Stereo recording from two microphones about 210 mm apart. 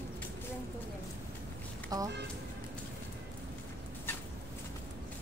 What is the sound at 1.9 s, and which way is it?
Speech, 15° right (ahead or behind).